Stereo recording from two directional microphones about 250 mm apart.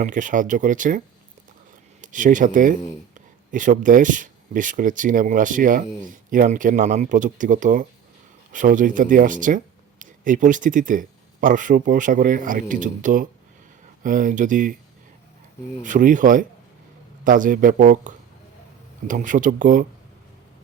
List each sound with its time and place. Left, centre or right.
0.0 s speech: right
15.8 s speech: right